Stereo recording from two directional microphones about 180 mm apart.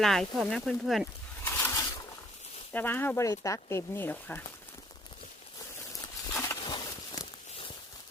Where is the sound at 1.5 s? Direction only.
10° left (ahead or behind).